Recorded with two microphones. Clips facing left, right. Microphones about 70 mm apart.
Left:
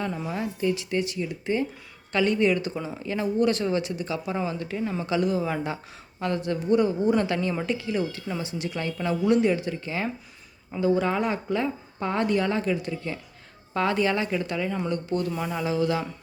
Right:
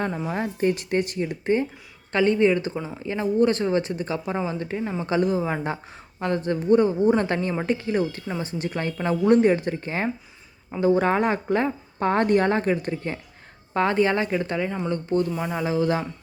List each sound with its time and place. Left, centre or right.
0.3 s speech: right